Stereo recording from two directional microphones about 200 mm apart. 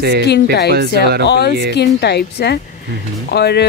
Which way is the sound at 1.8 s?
55° left (ahead or behind).